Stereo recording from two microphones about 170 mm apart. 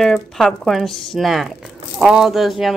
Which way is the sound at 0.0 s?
Centre (ahead or behind).